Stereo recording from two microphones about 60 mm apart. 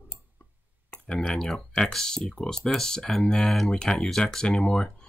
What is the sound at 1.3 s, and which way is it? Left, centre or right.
Speech, centre.